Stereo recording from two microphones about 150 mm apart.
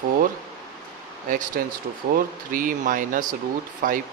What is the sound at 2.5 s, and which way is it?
Speech, 65° right (ahead or behind).